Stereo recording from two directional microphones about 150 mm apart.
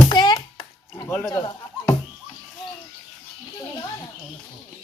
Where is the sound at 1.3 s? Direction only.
30° left (ahead or behind).